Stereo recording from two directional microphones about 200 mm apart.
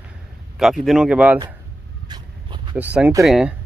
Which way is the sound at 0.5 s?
Centre (ahead or behind).